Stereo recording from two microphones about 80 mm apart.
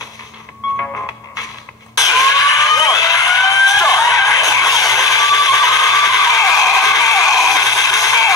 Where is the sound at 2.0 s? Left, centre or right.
Left.